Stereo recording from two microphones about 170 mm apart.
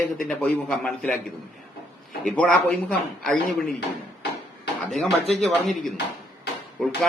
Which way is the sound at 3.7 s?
75° left (ahead or behind).